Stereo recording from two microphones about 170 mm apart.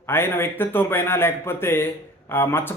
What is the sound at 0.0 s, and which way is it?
A man's voice, 15° left (ahead or behind).